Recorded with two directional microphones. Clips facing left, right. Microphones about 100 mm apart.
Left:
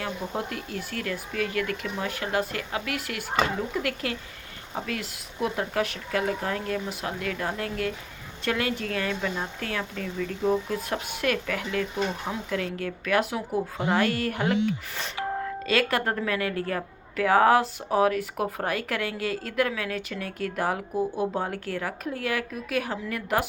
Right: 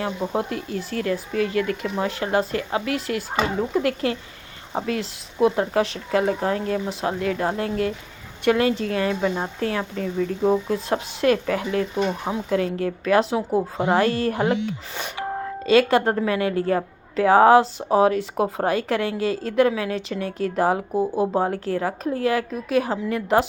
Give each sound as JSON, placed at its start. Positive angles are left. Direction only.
{"t": 0.0, "sound": "a woman's voice", "side_deg": -30}